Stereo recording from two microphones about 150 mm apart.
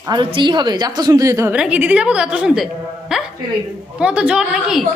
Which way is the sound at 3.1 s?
Centre (ahead or behind).